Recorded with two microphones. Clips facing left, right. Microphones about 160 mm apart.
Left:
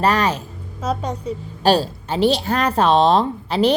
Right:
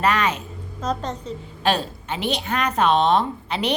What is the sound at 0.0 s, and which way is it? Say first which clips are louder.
Speech: left 3 dB; 35° left (ahead or behind).